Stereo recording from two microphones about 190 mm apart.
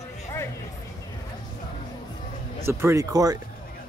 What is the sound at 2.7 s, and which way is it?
Speech, 15° right (ahead or behind).